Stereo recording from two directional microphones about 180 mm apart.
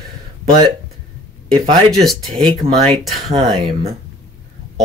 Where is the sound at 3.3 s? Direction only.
30° right (ahead or behind).